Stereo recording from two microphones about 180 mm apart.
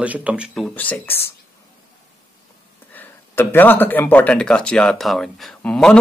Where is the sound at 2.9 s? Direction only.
10° left (ahead or behind).